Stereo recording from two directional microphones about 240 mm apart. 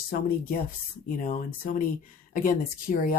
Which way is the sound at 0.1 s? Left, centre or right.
Left.